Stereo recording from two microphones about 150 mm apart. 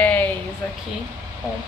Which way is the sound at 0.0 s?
10° left (ahead or behind).